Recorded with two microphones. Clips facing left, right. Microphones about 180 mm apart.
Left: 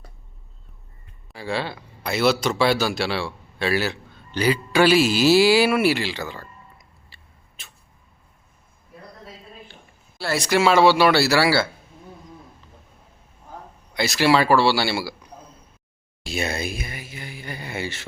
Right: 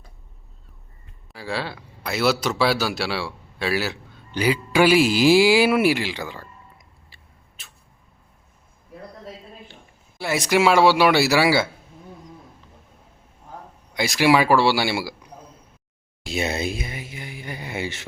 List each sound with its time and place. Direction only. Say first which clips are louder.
1.3 s a man's voice: left 2 dB; centre (ahead or behind)
7.6 s a sound: left 2 dB; centre (ahead or behind)
10.2 s speech: right 1 dB; 15° right (ahead or behind)
13.9 s speech: right 1 dB; 15° right (ahead or behind)
16.2 s speech: right 2 dB; 20° right (ahead or behind)